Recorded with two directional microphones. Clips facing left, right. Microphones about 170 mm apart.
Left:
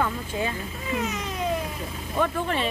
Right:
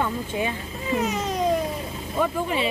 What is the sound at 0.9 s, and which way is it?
Speech, 35° right (ahead or behind).